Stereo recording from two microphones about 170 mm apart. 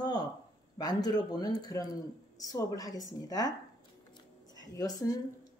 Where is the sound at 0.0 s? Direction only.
25° left (ahead or behind).